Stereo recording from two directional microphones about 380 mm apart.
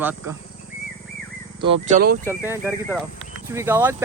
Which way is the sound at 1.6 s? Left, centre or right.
Centre.